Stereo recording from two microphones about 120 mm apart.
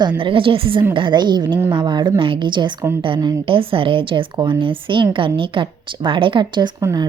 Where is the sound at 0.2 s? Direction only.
45° right (ahead or behind).